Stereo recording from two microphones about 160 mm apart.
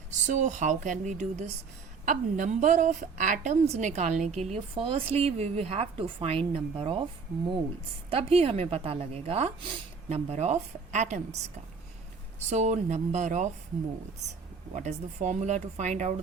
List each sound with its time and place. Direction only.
0.1 s a woman's voice: 50° right (ahead or behind)
4.4 s a woman's voice: 35° right (ahead or behind)
14.8 s a woman's voice: 50° right (ahead or behind)